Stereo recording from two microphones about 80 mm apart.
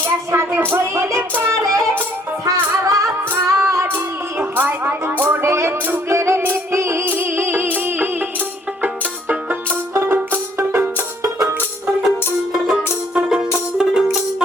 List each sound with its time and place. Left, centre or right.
0.3 s music: right
3.9 s music: right
5.4 s music: right
9.9 s music: right
13.1 s music: centre